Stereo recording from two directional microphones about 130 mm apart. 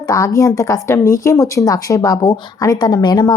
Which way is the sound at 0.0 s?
25° left (ahead or behind).